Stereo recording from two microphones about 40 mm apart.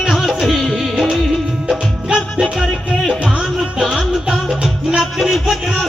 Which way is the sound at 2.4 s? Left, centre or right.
Centre.